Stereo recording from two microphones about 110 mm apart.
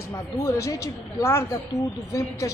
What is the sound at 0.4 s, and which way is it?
Speech, 30° left (ahead or behind).